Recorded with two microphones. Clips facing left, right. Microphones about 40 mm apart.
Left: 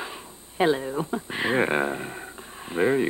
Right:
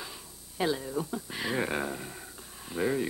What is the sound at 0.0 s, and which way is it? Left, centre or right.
Speech, left.